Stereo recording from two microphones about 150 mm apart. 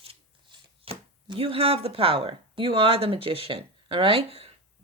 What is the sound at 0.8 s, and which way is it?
Speech, 35° right (ahead or behind).